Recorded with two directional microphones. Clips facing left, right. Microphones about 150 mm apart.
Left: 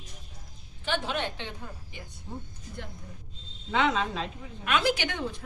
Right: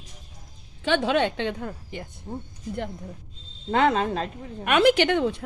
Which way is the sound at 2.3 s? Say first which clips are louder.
Right 5 dB; 50° right (ahead or behind).